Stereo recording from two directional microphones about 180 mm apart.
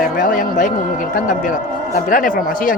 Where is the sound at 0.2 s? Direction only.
45° left (ahead or behind).